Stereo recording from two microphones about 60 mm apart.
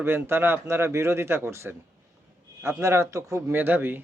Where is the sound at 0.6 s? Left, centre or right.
Right.